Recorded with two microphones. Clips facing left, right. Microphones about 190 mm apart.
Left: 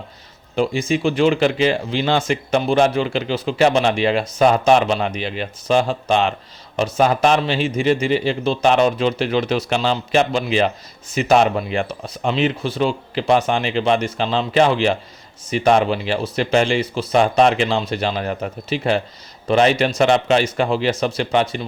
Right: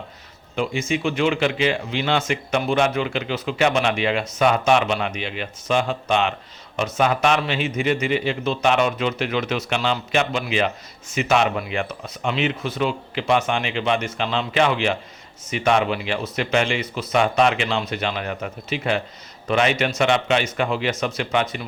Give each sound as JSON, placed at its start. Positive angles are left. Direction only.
{"t": 0.5, "sound": "speech", "side_deg": 35}